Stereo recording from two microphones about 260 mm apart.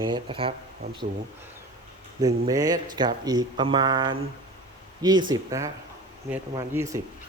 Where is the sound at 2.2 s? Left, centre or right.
Centre.